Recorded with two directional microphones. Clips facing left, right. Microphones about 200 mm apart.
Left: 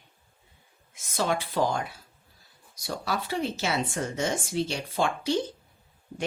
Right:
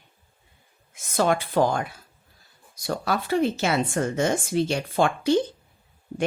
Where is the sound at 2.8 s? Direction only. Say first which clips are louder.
Right 5 dB; 55° right (ahead or behind).